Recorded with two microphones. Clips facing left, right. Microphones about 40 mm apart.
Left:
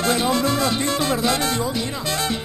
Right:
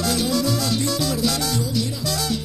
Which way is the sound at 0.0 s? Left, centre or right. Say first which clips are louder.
Left 2 dB; left.